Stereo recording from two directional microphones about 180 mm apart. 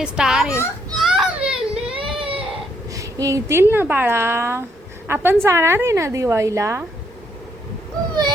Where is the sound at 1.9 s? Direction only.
30° right (ahead or behind).